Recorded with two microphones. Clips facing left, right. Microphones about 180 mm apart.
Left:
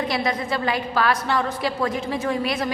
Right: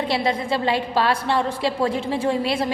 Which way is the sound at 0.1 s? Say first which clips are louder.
Right 2 dB; 30° right (ahead or behind).